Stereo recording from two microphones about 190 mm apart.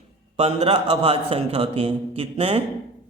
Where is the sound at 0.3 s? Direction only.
35° right (ahead or behind).